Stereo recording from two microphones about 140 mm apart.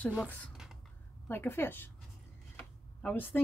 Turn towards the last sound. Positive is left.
turn(degrees=15)  # may be behind; listen again after turning